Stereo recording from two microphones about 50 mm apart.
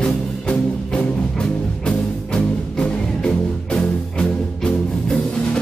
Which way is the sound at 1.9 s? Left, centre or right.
Centre.